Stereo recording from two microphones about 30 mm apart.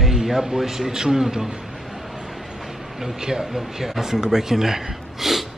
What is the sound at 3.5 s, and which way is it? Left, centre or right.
Speech, centre.